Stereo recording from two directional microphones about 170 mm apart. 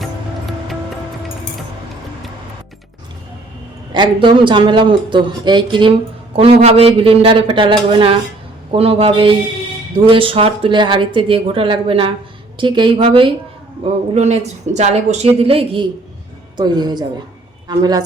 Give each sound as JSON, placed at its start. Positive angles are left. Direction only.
{"t": 3.9, "sound": "speech", "side_deg": -30}